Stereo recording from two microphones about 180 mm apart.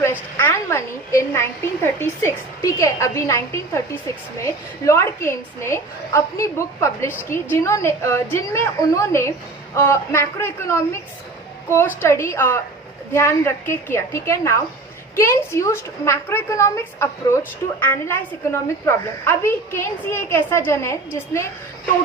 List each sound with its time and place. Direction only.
0.0 s a woman's voice: 10° left (ahead or behind)